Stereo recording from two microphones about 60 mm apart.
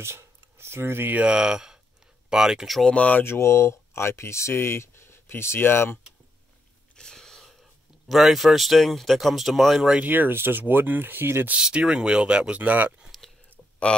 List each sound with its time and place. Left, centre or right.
0.0 s a sound: right
1.1 s speech: centre
2.8 s speech: left
3.3 s speech: left
7.0 s a sound: centre
8.1 s speech: centre
9.9 s speech: right
11.6 s speech: centre
13.5 s a sound: left